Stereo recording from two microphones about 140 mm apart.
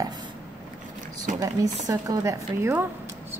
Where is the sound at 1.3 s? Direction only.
25° right (ahead or behind).